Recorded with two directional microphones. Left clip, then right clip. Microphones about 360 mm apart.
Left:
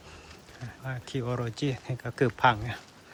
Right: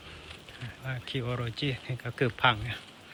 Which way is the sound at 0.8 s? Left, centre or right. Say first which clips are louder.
Left 1 dB; centre.